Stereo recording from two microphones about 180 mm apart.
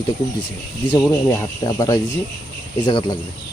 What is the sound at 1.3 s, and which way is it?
Speech, 15° left (ahead or behind).